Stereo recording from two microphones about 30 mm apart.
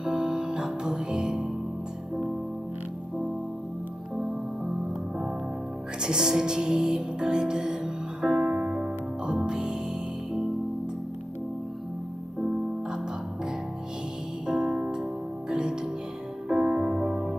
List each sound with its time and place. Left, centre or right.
0.0 s music: right
4.1 s music: centre
5.9 s music: right
8.5 s music: right
14.4 s music: right